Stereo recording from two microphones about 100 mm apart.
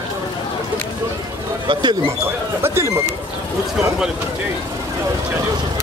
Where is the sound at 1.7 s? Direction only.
50° right (ahead or behind).